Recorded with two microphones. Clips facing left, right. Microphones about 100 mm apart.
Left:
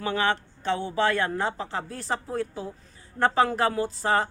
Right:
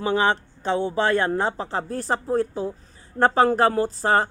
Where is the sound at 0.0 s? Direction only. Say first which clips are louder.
Right 4 dB; 25° right (ahead or behind).